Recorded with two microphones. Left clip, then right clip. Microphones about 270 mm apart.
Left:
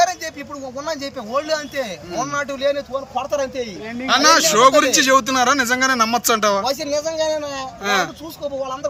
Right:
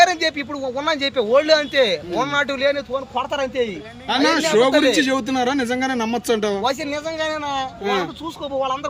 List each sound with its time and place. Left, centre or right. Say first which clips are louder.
0.0 s a man's voice: right 3 dB; right
4.1 s speech: left 3 dB; centre
6.6 s speech: left 2 dB; centre
7.9 s speech: left 3 dB; centre